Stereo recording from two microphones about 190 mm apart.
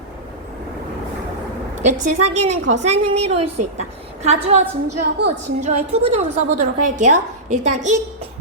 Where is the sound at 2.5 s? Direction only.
35° right (ahead or behind).